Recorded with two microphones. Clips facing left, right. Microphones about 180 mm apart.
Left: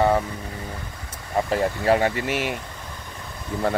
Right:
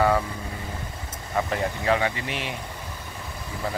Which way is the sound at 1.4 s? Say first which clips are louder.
Left 5 dB; 40° left (ahead or behind).